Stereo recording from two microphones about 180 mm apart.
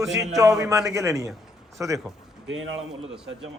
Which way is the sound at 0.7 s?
15° right (ahead or behind).